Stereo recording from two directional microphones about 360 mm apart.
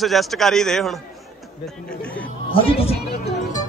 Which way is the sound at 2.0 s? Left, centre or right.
Centre.